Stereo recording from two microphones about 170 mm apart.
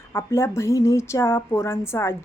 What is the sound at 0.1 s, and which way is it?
A woman's voice, 15° left (ahead or behind).